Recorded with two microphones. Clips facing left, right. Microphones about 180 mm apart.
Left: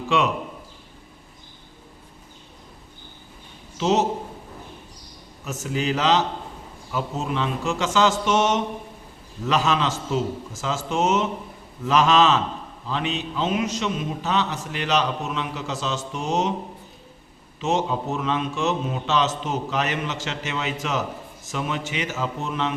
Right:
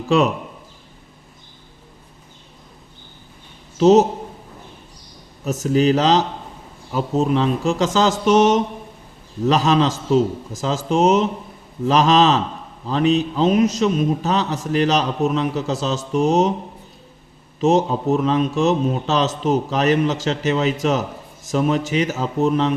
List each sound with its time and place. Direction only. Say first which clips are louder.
3.8 s a man's voice: right 9 dB; 40° right (ahead or behind)
5.5 s a man's voice: right 9 dB; 40° right (ahead or behind)
17.6 s a man's voice: right 7 dB; 40° right (ahead or behind)